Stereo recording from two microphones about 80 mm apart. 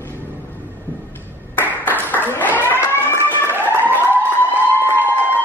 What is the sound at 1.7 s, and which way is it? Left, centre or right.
Applause, right.